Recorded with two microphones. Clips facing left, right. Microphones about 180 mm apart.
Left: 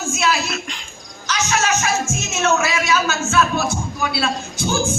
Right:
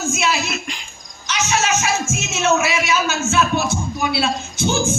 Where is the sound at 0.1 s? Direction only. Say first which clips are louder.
Left 3 dB; 20° right (ahead or behind).